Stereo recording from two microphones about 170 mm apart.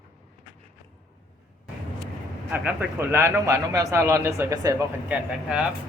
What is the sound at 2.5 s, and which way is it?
A man's voice, 10° right (ahead or behind).